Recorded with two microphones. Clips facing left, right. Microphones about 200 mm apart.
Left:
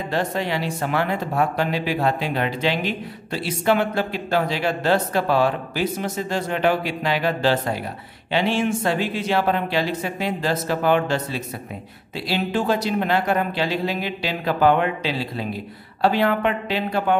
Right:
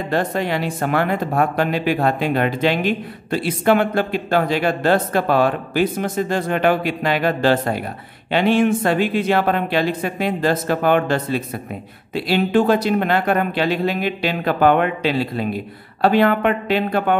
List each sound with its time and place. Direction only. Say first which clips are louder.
0.1 s speech: right 3 dB; 50° right (ahead or behind)